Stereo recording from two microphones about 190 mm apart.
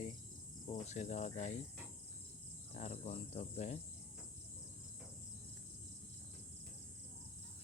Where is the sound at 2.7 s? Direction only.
35° left (ahead or behind).